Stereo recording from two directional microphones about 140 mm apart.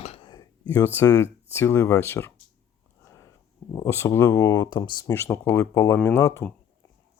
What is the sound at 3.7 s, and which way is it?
Speech, 20° left (ahead or behind).